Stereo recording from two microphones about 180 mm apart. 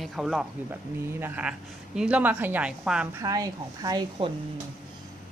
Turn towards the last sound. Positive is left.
turn(degrees=-20)  # may be behind; listen again after turning